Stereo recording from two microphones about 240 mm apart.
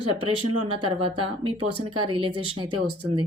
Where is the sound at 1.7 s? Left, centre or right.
Right.